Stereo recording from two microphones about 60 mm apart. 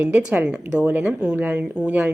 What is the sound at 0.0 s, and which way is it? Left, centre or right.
Speech, centre.